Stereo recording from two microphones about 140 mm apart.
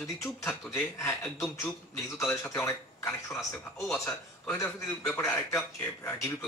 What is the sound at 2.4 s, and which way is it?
A man's voice, 15° left (ahead or behind).